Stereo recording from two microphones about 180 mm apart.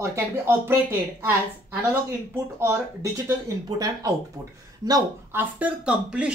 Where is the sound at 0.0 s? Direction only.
15° right (ahead or behind).